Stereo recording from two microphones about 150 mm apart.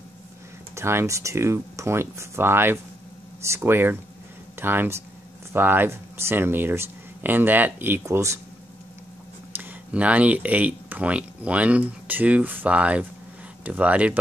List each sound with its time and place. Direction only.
0.7 s speech: 20° right (ahead or behind)
9.5 s speech: 10° right (ahead or behind)